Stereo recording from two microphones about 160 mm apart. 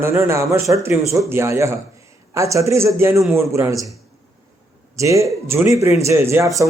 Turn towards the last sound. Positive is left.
turn(degrees=-15)  # may be behind; listen again after turning